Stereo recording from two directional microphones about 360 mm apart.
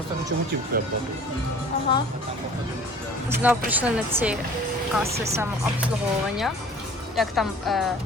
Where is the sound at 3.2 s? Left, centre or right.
Centre.